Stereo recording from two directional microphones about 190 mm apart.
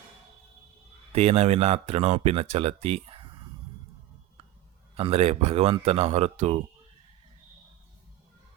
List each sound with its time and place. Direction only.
1.1 s speech: 30° right (ahead or behind)
4.9 s speech: 30° right (ahead or behind)